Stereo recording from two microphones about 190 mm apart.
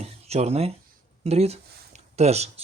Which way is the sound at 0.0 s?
35° right (ahead or behind).